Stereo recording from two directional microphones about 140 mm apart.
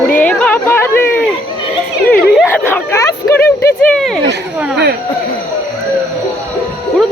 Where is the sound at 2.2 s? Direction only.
5° right (ahead or behind).